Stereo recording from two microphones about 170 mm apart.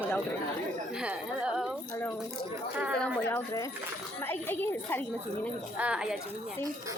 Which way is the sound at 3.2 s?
15° left (ahead or behind).